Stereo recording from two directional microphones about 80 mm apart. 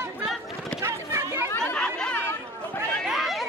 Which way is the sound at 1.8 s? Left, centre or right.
Centre.